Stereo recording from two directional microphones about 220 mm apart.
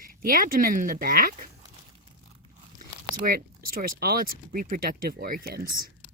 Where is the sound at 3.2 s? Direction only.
40° right (ahead or behind).